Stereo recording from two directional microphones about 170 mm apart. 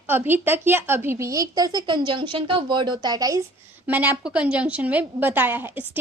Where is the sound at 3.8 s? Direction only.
10° right (ahead or behind).